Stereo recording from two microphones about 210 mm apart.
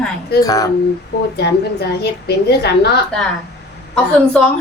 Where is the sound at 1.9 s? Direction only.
50° left (ahead or behind).